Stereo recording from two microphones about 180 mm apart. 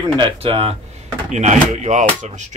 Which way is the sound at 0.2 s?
30° right (ahead or behind).